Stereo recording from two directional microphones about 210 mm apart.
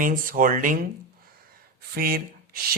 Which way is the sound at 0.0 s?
40° right (ahead or behind).